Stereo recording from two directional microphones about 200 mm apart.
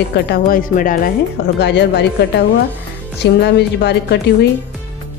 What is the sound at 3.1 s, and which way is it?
A woman's voice, 55° left (ahead or behind).